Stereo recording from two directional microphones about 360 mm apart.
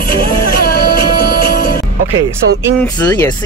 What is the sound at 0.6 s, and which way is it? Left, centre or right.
Music, left.